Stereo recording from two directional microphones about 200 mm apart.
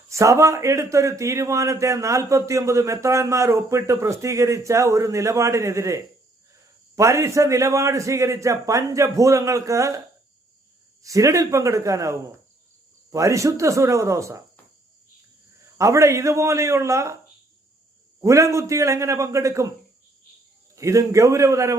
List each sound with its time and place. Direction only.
0.1 s a man's voice: 15° right (ahead or behind)
11.0 s a man's voice: 15° right (ahead or behind)
15.8 s a man's voice: 15° right (ahead or behind)
18.2 s a man's voice: 15° right (ahead or behind)
20.7 s a man's voice: 15° right (ahead or behind)